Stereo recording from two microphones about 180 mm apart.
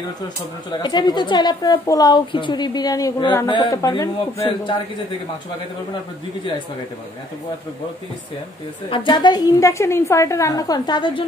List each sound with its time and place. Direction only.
0.7 s a woman's voice: 25° left (ahead or behind)
8.9 s a woman's voice: 25° left (ahead or behind)